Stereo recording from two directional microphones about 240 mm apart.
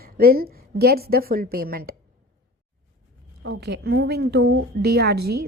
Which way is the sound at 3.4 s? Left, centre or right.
Right.